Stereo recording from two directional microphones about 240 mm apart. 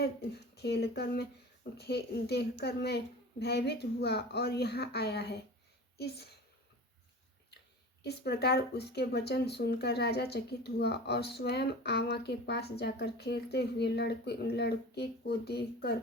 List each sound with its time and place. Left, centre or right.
0.5 s speech: left
8.0 s speech: left